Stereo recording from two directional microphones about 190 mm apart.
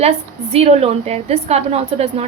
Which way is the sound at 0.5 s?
30° right (ahead or behind).